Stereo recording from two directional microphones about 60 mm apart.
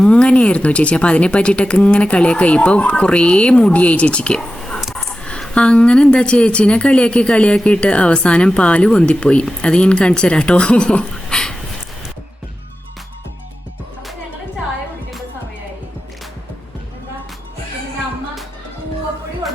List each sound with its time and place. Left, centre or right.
0.0 s speech: centre
4.8 s a sound: centre
5.5 s speech: centre